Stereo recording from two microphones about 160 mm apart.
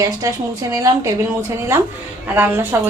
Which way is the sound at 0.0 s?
20° right (ahead or behind).